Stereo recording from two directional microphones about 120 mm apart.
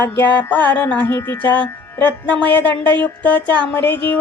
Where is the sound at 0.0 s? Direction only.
15° left (ahead or behind).